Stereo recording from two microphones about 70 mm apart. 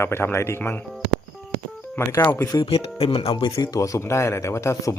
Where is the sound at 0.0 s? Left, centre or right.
Left.